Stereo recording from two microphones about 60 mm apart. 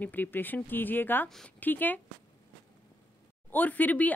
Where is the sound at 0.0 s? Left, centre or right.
Left.